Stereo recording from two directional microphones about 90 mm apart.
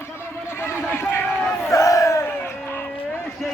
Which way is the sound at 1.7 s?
40° left (ahead or behind).